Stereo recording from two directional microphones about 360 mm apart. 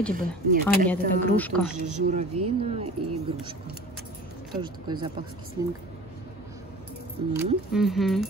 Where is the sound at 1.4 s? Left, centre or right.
Centre.